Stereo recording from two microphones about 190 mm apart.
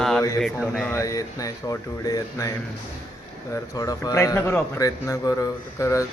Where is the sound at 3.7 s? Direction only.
20° left (ahead or behind).